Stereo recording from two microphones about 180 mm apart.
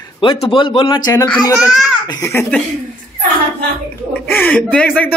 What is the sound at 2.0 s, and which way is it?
Speech, 15° left (ahead or behind).